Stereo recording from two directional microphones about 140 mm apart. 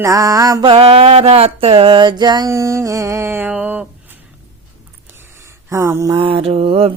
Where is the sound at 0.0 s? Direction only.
25° right (ahead or behind).